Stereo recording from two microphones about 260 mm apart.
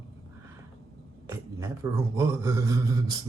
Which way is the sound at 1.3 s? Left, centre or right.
Centre.